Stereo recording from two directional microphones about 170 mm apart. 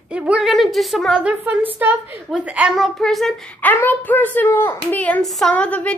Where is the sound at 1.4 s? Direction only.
10° right (ahead or behind).